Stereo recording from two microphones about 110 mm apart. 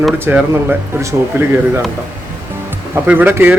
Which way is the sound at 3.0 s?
20° right (ahead or behind).